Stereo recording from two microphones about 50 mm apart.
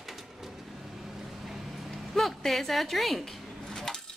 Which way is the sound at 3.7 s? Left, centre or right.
Centre.